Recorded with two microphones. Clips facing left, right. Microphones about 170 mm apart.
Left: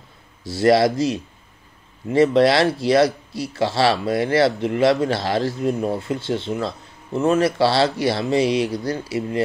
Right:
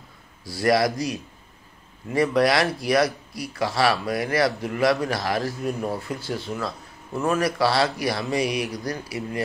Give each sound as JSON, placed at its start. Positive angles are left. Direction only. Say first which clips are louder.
{"t": 0.5, "sound": "speech", "louder": "left 5 dB", "side_deg": 25}